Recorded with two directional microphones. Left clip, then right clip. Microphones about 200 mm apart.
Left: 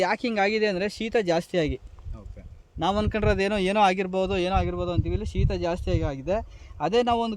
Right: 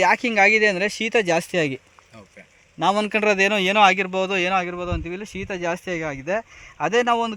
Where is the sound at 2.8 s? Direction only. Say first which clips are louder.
Right 6 dB; 25° right (ahead or behind); by 7.3 s 5° right (ahead or behind).